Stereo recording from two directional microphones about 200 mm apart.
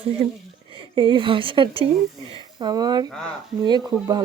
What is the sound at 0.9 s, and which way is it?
Speech, 25° right (ahead or behind).